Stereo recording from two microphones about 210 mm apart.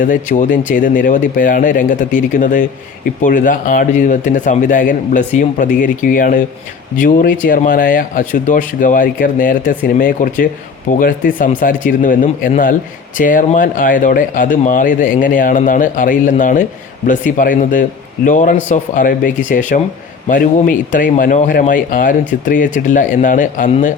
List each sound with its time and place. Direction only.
0.0 s speech: 40° left (ahead or behind)